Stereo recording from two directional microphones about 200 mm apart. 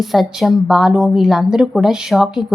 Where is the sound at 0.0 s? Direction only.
Centre (ahead or behind).